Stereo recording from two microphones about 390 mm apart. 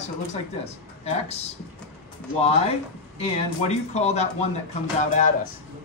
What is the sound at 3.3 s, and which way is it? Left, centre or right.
Speech, centre.